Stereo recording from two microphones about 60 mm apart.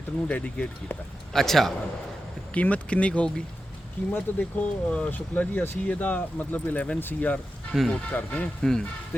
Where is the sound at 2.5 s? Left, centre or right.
Left.